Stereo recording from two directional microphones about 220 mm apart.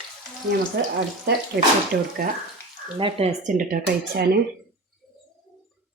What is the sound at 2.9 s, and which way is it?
Speech, 25° right (ahead or behind).